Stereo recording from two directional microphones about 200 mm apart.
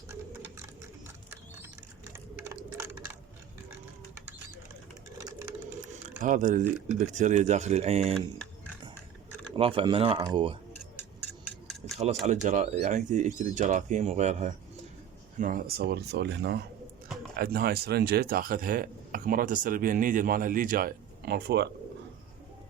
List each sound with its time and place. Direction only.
0.1 s sewing machine: 15° right (ahead or behind)
2.1 s typing: 15° right (ahead or behind)
5.1 s sewing machine: 15° right (ahead or behind)
5.9 s a sound: 40° right (ahead or behind)
7.0 s speech: 35° right (ahead or behind)
9.6 s speech: 25° right (ahead or behind)
11.4 s a sound: centre (ahead or behind)
12.2 s speech: 35° right (ahead or behind); by 21.7 s 55° right (ahead or behind)